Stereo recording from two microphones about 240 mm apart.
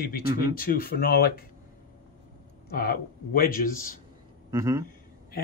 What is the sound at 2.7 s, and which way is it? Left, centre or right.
Speech, left.